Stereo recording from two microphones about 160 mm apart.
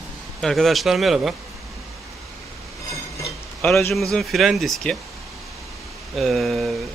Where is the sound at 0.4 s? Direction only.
Centre (ahead or behind).